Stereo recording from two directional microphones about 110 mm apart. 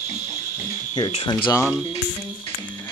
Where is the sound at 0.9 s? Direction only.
45° left (ahead or behind).